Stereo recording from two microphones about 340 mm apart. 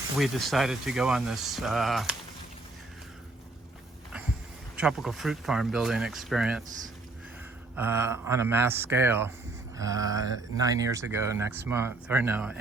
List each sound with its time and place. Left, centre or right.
0.2 s speech: centre
4.8 s speech: centre
7.8 s speech: centre